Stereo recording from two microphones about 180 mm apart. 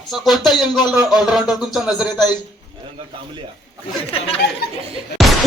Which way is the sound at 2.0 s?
20° left (ahead or behind).